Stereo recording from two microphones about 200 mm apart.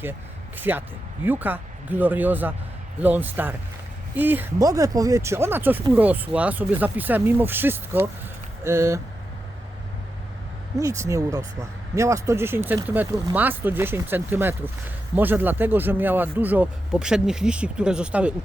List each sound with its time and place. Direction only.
0.0 s speech: 10° right (ahead or behind)
10.8 s speech: 15° right (ahead or behind)